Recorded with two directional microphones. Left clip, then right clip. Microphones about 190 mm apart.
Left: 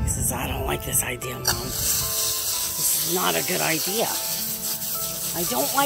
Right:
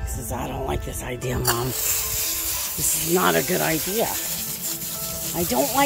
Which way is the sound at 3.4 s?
20° right (ahead or behind).